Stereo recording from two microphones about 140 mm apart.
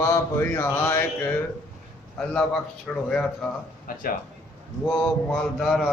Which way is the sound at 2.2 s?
5° left (ahead or behind).